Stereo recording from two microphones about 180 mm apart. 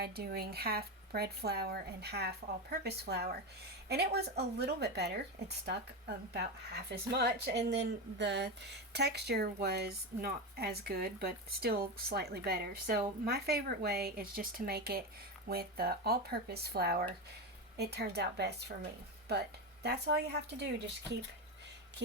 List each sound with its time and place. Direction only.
0.0 s speech: 60° right (ahead or behind)
20.6 s speech: 70° right (ahead or behind)